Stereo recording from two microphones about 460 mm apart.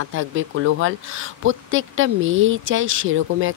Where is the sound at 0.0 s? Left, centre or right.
Right.